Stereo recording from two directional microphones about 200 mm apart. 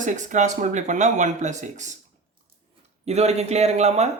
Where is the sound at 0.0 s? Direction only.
40° right (ahead or behind).